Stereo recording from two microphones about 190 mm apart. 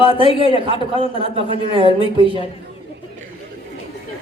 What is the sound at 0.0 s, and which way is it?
A man's voice, 30° left (ahead or behind).